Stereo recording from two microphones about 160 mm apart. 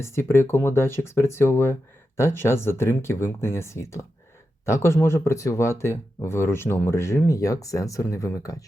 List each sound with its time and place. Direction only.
0.0 s speech: 15° left (ahead or behind)